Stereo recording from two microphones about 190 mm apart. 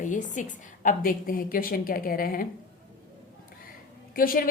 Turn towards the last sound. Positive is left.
turn(degrees=50)  # may be behind; listen again after turning